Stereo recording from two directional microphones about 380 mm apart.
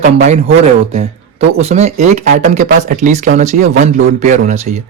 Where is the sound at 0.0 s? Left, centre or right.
Centre.